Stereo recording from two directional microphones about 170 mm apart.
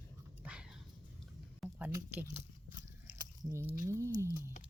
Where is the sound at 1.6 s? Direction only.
5° right (ahead or behind).